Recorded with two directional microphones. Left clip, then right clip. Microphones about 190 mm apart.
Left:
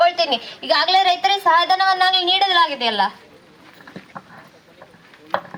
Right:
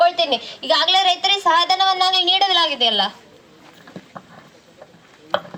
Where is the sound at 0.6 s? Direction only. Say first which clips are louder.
Even; 30° right (ahead or behind).